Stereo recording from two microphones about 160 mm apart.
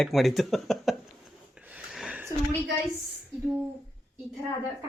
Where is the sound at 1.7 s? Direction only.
5° right (ahead or behind).